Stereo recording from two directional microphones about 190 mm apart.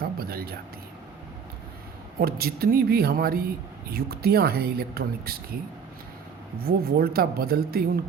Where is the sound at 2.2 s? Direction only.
55° right (ahead or behind).